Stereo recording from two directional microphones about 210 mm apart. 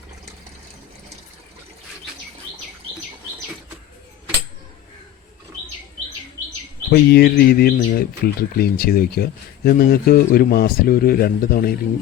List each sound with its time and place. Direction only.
6.9 s speech: 50° left (ahead or behind)